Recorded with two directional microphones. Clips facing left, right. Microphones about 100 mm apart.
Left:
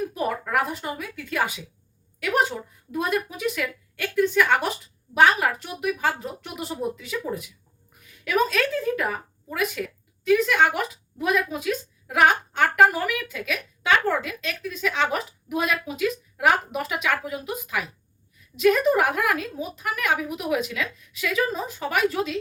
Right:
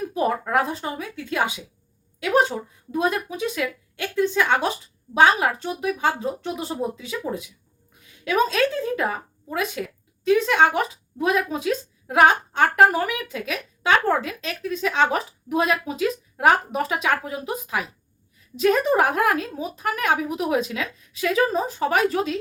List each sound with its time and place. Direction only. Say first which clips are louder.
0.1 s speech: right 4 dB; 30° right (ahead or behind)
2.9 s speech: right 2 dB; 25° right (ahead or behind)
8.2 s speech: right 2 dB; 25° right (ahead or behind)